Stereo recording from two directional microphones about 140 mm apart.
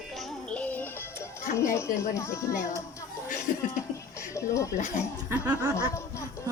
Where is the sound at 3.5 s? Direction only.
70° left (ahead or behind).